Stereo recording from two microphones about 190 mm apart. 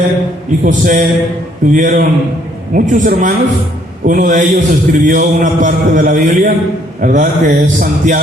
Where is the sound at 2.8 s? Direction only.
40° right (ahead or behind).